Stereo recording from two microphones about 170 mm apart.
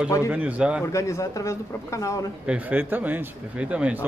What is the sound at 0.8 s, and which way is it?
Speech, 15° left (ahead or behind).